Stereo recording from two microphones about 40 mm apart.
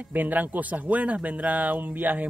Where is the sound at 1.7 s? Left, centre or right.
Right.